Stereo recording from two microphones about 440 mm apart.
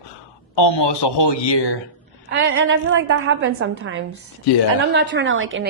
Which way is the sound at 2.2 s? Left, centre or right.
Right.